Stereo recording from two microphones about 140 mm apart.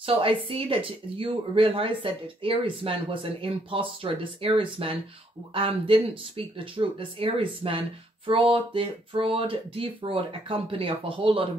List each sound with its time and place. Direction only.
0.0 s speech: 40° right (ahead or behind)